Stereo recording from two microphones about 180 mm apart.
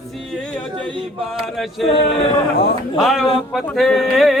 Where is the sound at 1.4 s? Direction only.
Centre (ahead or behind).